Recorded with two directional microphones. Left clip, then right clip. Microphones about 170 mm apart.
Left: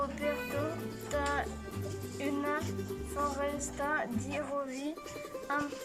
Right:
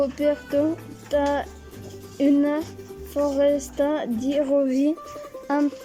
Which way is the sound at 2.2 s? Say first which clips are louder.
Right 13 dB; 45° right (ahead or behind).